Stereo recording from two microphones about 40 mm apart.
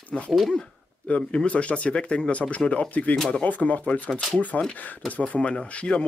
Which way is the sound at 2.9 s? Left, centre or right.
Left.